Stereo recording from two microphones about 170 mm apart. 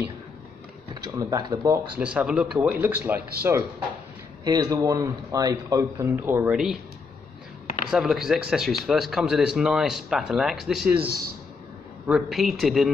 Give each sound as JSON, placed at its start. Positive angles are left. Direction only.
{"t": 1.0, "sound": "speech", "side_deg": -25}
{"t": 2.0, "sound": "a man's voice", "side_deg": -5}
{"t": 7.9, "sound": "speech", "side_deg": 0}
{"t": 12.1, "sound": "speech", "side_deg": 0}